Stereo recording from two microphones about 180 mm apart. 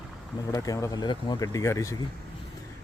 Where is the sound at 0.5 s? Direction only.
20° left (ahead or behind).